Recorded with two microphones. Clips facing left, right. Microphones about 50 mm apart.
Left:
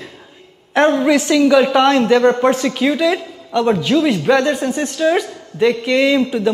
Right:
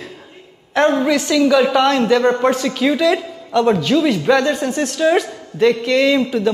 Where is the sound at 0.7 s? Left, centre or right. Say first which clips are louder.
Left 1 dB; left.